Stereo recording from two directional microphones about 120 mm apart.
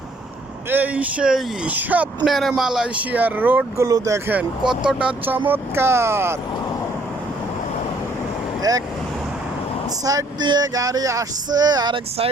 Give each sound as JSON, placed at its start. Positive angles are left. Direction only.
{"t": 0.7, "sound": "speech", "side_deg": -15}
{"t": 2.3, "sound": "speech", "side_deg": 0}
{"t": 3.8, "sound": "speech", "side_deg": -30}
{"t": 4.3, "sound": "speech", "side_deg": -10}
{"t": 8.7, "sound": "vehicle", "side_deg": -30}
{"t": 10.0, "sound": "vehicle", "side_deg": -30}